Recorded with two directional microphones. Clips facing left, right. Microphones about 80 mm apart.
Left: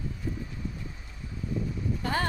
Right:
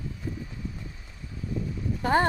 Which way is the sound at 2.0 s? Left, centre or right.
Right.